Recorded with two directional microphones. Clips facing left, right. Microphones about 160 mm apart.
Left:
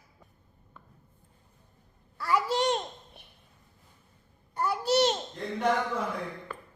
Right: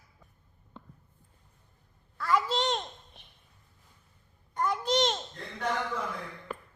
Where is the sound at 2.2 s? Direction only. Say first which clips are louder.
Left 1 dB; 10° left (ahead or behind).